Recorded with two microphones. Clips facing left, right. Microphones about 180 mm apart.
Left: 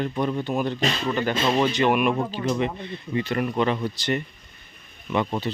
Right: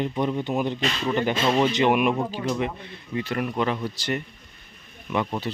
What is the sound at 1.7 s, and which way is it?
Speech, 20° right (ahead or behind).